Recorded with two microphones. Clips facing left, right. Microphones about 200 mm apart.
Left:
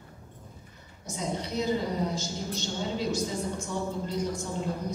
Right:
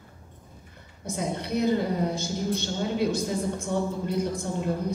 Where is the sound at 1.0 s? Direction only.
60° right (ahead or behind).